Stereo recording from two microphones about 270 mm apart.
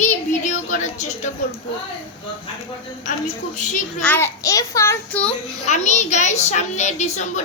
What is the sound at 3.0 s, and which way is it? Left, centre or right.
A woman's voice, left.